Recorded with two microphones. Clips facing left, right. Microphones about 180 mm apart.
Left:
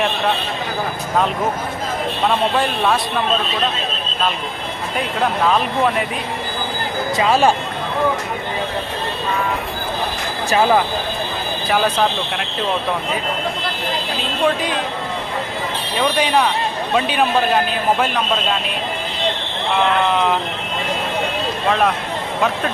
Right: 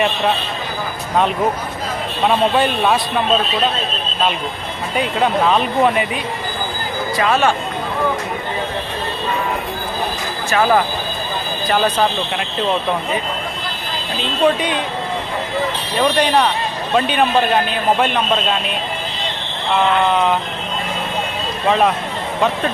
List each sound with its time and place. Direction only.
2.2 s a man's voice: centre (ahead or behind)
4.9 s a man's voice: centre (ahead or behind)
7.2 s speech: 30° left (ahead or behind)
11.9 s a man's voice: centre (ahead or behind)
14.4 s a man's voice: centre (ahead or behind)
16.0 s a man's voice: 5° left (ahead or behind)
21.7 s a man's voice: centre (ahead or behind)